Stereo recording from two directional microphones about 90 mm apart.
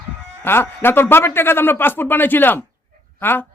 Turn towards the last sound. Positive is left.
turn(degrees=25)  # may be behind; listen again after turning